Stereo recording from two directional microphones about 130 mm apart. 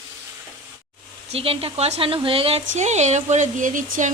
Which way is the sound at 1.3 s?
45° right (ahead or behind).